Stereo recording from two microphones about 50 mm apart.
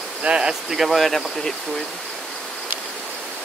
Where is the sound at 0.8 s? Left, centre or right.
Centre.